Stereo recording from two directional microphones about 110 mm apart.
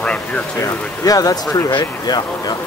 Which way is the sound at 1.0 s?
35° left (ahead or behind).